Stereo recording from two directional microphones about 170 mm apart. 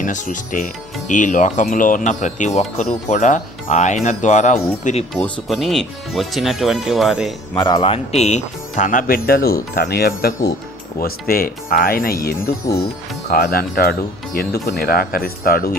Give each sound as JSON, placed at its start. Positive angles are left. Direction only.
{"t": 0.0, "sound": "speech", "side_deg": 50}
{"t": 5.1, "sound": "speech", "side_deg": 0}
{"t": 7.6, "sound": "speech", "side_deg": 30}